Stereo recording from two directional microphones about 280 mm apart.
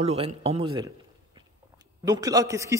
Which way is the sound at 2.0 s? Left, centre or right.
Centre.